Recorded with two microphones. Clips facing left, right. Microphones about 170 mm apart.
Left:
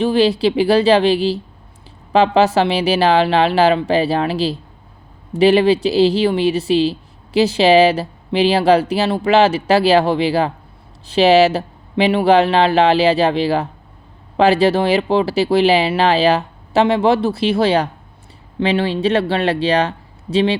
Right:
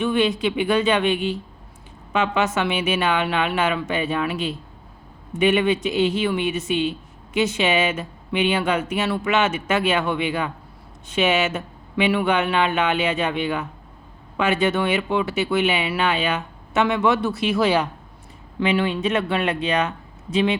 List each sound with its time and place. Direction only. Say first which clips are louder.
0.0 s speech: left 6 dB; 30° left (ahead or behind)